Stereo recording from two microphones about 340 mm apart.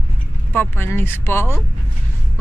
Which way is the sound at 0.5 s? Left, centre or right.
Centre.